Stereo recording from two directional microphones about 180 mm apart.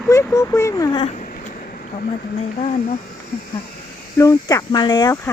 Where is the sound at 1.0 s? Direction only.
45° left (ahead or behind).